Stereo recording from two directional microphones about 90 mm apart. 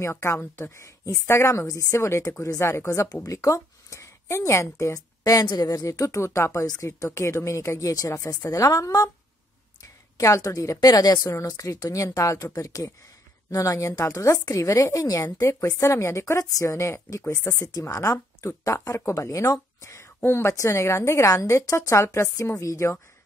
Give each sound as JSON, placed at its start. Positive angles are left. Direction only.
{"t": 0.0, "sound": "a woman's voice", "side_deg": 30}
{"t": 10.1, "sound": "a woman's voice", "side_deg": 40}
{"t": 17.5, "sound": "a woman's voice", "side_deg": 45}